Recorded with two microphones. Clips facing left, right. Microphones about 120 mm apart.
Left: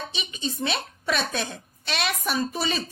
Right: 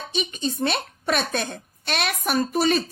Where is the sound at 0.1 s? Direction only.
50° right (ahead or behind).